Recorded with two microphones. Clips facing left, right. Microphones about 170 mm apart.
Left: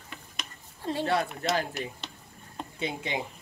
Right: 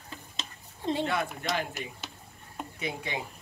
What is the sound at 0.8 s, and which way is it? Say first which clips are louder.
Speech: right 1 dB; 20° right (ahead or behind).